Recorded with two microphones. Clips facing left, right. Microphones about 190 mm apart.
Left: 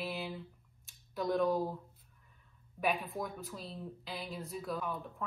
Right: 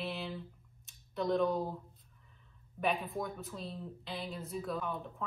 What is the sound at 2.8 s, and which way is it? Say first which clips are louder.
Speech: even; centre (ahead or behind).